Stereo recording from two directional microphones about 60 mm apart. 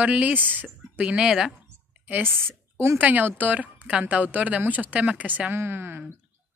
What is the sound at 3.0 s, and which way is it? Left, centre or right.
Speech, right.